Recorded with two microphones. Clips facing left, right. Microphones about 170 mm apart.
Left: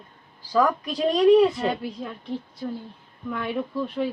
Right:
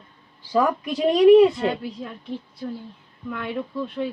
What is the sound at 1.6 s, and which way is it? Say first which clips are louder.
Speech: right 1 dB; centre (ahead or behind).